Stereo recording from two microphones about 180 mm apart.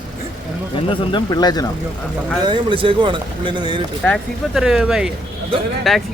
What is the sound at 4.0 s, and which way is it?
Speech, centre (ahead or behind).